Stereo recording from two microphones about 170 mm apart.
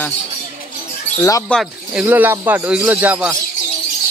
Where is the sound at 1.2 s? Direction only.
15° left (ahead or behind).